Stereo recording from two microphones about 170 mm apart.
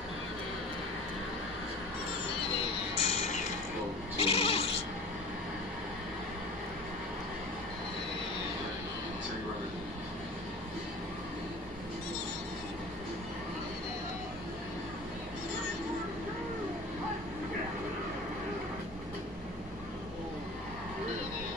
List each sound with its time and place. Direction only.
2.9 s music: 40° left (ahead or behind)
4.2 s goat: 35° left (ahead or behind)